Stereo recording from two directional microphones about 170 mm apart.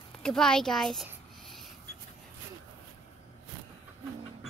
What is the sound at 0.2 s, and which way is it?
Speech, 5° left (ahead or behind).